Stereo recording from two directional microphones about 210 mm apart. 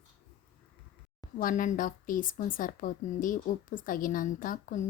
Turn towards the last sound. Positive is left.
turn(degrees=40)  # may be behind; listen again after turning